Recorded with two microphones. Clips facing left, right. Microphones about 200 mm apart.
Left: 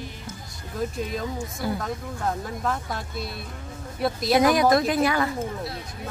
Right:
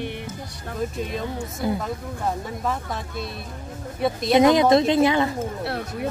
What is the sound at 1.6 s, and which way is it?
Speech, 20° right (ahead or behind).